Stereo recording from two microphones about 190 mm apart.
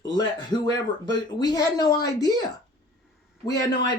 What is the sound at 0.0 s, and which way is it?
Speech, 20° left (ahead or behind).